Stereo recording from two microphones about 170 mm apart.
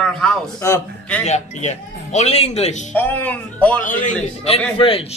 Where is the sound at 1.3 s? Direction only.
40° left (ahead or behind).